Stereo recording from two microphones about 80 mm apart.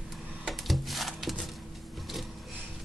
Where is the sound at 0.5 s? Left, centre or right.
Centre.